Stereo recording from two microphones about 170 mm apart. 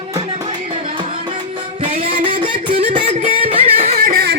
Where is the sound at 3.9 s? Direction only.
60° right (ahead or behind).